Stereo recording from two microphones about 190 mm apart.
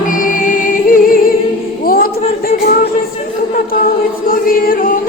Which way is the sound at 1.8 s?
50° left (ahead or behind).